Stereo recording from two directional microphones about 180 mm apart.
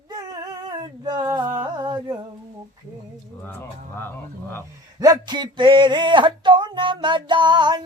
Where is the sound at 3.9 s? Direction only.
10° left (ahead or behind).